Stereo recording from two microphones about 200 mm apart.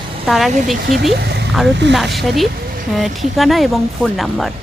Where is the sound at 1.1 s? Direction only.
55° right (ahead or behind).